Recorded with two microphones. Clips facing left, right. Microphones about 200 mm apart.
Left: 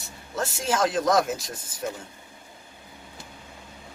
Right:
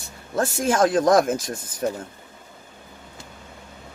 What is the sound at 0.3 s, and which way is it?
Speech, 50° right (ahead or behind).